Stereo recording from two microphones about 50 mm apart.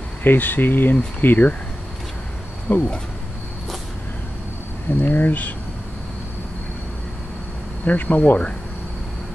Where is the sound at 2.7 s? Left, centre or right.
Left.